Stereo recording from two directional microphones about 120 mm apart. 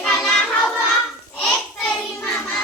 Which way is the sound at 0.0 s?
5° left (ahead or behind).